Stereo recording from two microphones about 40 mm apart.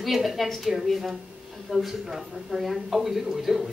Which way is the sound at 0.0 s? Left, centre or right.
Centre.